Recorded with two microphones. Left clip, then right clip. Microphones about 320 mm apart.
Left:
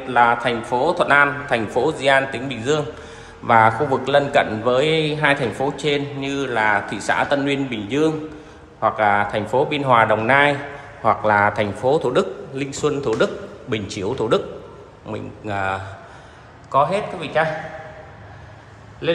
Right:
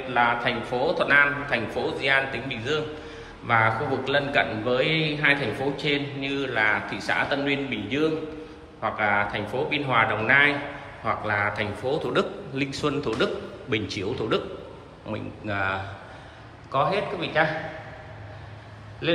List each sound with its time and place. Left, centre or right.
0.1 s a man's voice: centre